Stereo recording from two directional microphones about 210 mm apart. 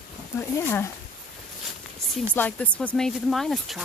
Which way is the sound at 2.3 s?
5° left (ahead or behind).